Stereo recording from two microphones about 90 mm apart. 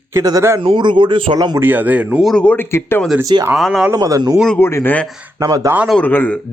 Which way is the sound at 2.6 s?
30° left (ahead or behind).